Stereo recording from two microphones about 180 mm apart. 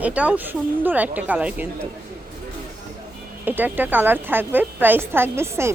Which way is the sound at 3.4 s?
10° right (ahead or behind).